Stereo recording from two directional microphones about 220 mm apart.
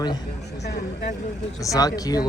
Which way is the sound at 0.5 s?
50° left (ahead or behind).